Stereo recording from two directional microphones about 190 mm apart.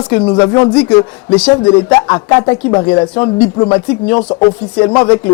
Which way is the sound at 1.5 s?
25° left (ahead or behind).